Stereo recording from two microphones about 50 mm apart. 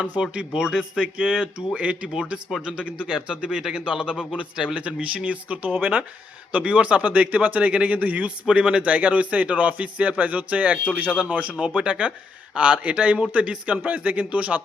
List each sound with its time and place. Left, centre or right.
0.2 s speech: centre
0.9 s a man's voice: right
2.1 s a man's voice: centre; by 8.3 s right
8.4 s a man's voice: centre